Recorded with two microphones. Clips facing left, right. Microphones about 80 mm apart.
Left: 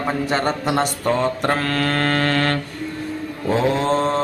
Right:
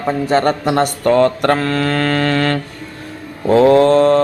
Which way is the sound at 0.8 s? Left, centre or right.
Right.